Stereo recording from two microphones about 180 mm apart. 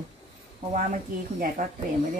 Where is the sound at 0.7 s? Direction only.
45° right (ahead or behind).